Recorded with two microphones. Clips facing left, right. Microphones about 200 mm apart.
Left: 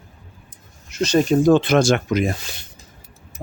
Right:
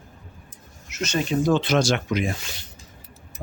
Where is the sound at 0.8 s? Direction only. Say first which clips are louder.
Left 8 dB; 35° left (ahead or behind).